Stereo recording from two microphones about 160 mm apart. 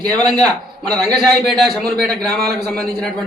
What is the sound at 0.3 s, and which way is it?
Speech, 25° right (ahead or behind).